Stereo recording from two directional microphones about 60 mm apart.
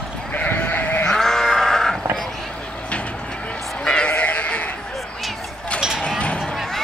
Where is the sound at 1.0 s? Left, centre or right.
Centre.